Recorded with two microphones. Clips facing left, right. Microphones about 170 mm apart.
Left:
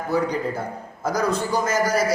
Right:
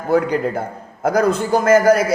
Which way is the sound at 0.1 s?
55° right (ahead or behind).